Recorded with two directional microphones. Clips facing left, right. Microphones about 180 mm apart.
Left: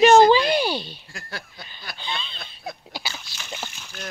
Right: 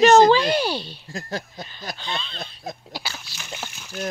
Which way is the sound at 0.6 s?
35° right (ahead or behind).